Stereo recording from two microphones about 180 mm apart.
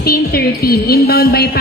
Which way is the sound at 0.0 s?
55° left (ahead or behind).